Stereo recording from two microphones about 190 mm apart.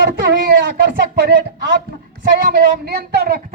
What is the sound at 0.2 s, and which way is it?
A woman's voice, 60° right (ahead or behind).